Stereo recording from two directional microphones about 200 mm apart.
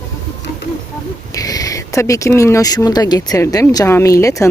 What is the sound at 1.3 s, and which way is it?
Speech, 15° left (ahead or behind).